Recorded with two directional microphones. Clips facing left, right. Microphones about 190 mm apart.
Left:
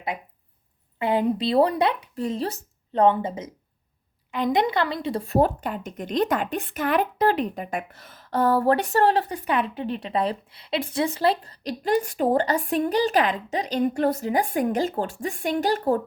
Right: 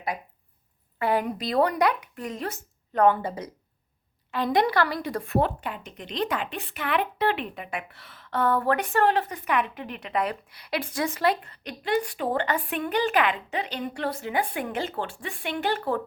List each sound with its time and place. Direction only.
0.9 s speech: 20° left (ahead or behind); by 16.0 s 40° left (ahead or behind)